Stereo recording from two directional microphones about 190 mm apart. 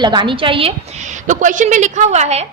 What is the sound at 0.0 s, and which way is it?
A woman's voice, 25° right (ahead or behind).